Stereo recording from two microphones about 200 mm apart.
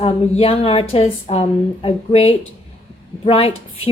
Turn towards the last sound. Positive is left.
turn(degrees=30)  # may be behind; listen again after turning